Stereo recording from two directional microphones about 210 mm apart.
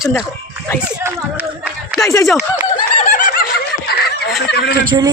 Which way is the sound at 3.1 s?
35° left (ahead or behind).